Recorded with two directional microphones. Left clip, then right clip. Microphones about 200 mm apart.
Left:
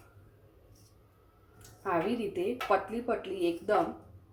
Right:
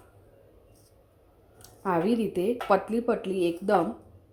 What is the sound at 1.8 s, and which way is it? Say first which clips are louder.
Speech: right 5 dB; 50° right (ahead or behind).